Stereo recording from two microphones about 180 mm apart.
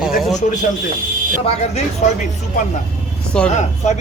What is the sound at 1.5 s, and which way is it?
Speech, 35° left (ahead or behind).